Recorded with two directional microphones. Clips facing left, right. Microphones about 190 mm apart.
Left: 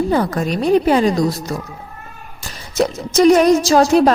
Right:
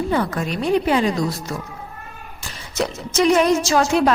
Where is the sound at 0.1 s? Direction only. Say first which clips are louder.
Left 4 dB; 40° left (ahead or behind).